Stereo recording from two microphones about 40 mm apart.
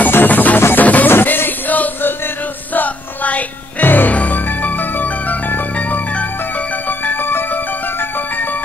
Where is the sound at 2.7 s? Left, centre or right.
Left.